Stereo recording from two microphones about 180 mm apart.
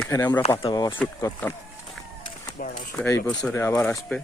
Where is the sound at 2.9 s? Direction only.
10° left (ahead or behind).